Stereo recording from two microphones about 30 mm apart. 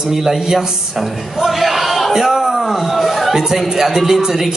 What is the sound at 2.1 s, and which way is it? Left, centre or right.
Speech, centre.